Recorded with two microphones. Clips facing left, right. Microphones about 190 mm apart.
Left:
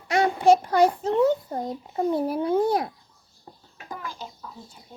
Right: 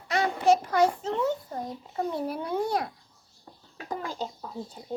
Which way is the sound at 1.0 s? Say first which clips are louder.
Left 7 dB; 35° left (ahead or behind).